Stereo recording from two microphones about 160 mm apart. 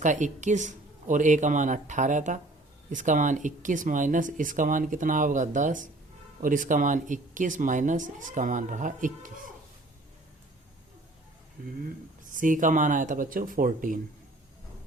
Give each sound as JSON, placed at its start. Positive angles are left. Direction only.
{"t": 0.0, "sound": "speech", "side_deg": -50}
{"t": 11.9, "sound": "speech", "side_deg": -55}